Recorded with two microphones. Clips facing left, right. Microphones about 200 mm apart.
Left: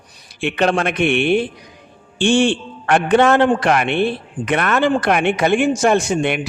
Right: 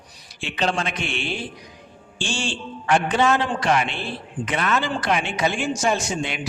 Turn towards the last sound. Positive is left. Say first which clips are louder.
# left 8 dB
turn(degrees=60)  # may be behind; listen again after turning